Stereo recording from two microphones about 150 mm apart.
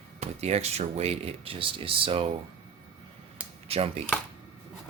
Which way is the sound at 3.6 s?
40° right (ahead or behind).